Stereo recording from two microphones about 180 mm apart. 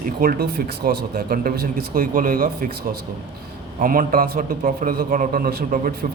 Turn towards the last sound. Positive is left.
turn(degrees=-55)  # may be behind; listen again after turning